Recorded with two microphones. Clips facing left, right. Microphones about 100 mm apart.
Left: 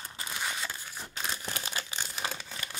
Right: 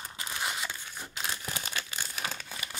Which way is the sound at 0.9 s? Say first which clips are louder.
Left 1 dB; centre (ahead or behind).